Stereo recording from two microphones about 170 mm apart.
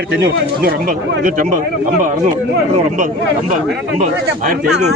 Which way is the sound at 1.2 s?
55° right (ahead or behind).